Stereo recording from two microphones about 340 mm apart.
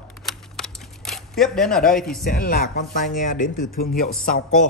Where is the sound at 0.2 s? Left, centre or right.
Centre.